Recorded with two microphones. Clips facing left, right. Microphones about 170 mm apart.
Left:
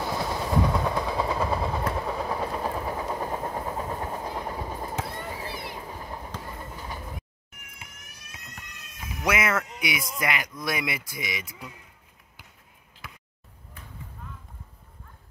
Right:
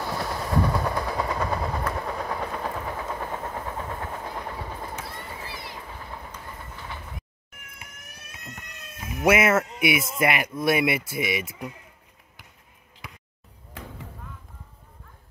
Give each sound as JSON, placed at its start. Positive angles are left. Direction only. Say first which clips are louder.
{"t": 0.0, "sound": "train", "louder": "left 1 dB", "side_deg": 5}
{"t": 2.0, "sound": "vehicle", "louder": "left 1 dB", "side_deg": 5}
{"t": 5.7, "sound": "train", "louder": "left 2 dB", "side_deg": 15}
{"t": 9.2, "sound": "speech", "louder": "right 6 dB", "side_deg": -25}
{"t": 13.8, "sound": "a sound", "louder": "right 9 dB", "side_deg": -90}